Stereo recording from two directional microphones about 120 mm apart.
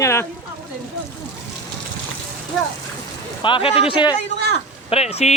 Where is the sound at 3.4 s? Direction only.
45° left (ahead or behind).